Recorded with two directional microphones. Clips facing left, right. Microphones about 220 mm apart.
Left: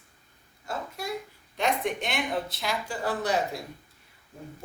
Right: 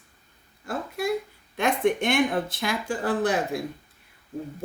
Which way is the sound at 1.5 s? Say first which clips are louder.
Right 5 dB; 55° right (ahead or behind).